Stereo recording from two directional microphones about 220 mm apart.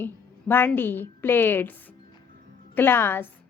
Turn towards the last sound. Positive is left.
turn(degrees=10)  # may be behind; listen again after turning